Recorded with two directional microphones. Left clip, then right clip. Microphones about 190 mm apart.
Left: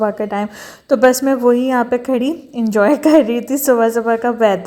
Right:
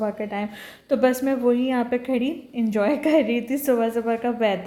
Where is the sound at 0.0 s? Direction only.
35° left (ahead or behind).